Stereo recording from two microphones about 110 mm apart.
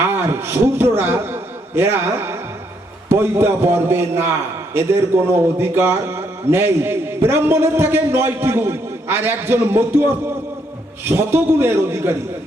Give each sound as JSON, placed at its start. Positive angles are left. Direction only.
{"t": 0.0, "sound": "a man's voice", "side_deg": -20}
{"t": 11.2, "sound": "a man's voice", "side_deg": -20}